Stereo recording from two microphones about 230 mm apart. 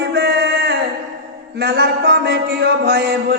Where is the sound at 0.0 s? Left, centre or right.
Right.